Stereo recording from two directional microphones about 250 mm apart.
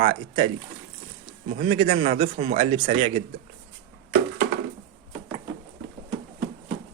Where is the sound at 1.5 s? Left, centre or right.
Right.